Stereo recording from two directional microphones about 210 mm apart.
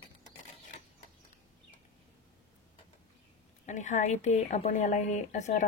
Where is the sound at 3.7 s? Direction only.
35° left (ahead or behind).